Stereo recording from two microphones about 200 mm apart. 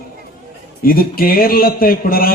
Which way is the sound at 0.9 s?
45° left (ahead or behind).